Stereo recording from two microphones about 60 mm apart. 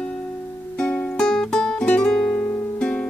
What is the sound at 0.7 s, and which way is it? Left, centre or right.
Music, centre.